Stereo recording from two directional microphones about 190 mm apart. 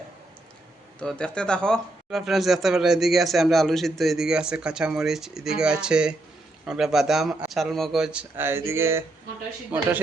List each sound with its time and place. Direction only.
0.9 s speech: 5° left (ahead or behind); by 9.0 s 15° right (ahead or behind)